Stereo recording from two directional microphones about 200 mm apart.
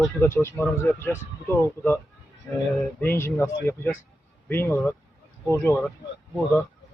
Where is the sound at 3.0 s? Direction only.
10° left (ahead or behind).